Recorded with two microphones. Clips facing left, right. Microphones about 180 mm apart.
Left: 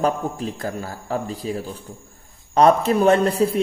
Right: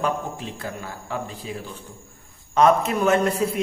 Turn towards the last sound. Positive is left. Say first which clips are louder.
# left 3 dB
turn(degrees=30)  # may be behind; listen again after turning